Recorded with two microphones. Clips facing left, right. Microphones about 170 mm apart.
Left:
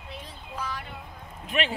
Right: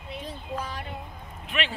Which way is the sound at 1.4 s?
40° left (ahead or behind).